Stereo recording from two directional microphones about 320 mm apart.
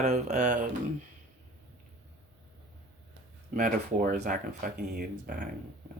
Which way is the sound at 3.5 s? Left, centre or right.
Right.